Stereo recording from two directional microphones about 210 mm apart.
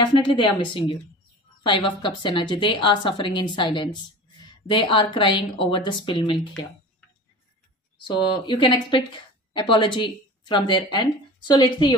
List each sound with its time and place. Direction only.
0.0 s a woman's voice: 25° left (ahead or behind)
8.1 s a woman's voice: 20° left (ahead or behind)